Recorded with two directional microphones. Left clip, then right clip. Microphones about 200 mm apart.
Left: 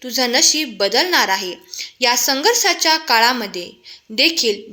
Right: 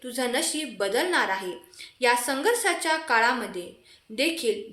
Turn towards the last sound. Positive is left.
turn(degrees=35)  # may be behind; listen again after turning